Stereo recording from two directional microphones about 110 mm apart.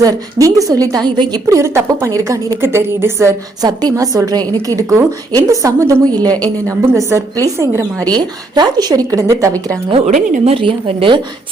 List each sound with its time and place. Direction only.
0.0 s a woman's voice: 30° right (ahead or behind)
8.1 s a woman's voice: 40° right (ahead or behind)
9.9 s a woman's voice: 75° right (ahead or behind); by 11.2 s 55° right (ahead or behind)